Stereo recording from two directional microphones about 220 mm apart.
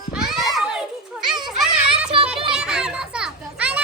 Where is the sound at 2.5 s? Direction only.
5° right (ahead or behind).